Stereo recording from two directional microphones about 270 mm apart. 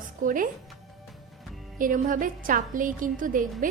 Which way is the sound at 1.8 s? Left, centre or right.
Right.